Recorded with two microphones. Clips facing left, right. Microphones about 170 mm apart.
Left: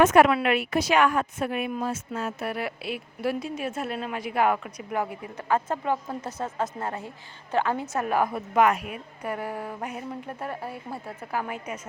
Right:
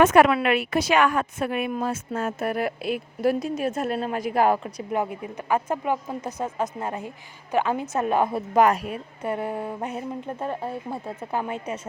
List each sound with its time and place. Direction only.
0.0 s a woman's voice: 85° right
1.7 s a woman's voice: 55° right (ahead or behind); by 11.8 s 25° right (ahead or behind)